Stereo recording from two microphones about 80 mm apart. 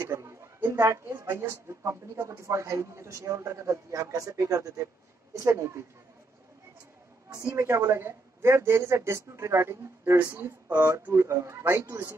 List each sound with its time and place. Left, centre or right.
0.0 s a sound: right
0.7 s speech: right
7.5 s speech: right
10.7 s speech: right